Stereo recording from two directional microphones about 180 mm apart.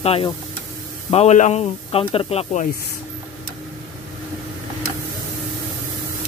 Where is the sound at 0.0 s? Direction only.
35° left (ahead or behind).